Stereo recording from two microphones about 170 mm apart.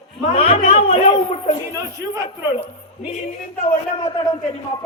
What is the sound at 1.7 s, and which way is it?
Speech, 15° right (ahead or behind).